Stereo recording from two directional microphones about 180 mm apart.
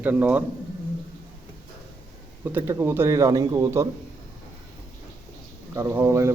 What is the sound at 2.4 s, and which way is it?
Speech, 10° right (ahead or behind).